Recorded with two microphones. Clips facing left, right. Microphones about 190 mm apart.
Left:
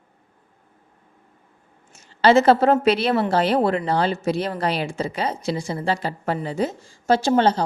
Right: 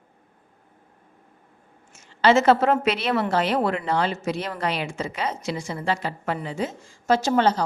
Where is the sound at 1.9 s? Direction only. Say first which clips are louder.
Left 3 dB; 35° left (ahead or behind).